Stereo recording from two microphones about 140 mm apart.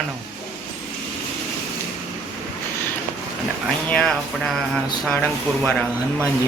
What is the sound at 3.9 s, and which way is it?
Speech, 5° left (ahead or behind).